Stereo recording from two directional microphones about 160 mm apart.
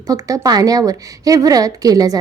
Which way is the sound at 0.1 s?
20° right (ahead or behind).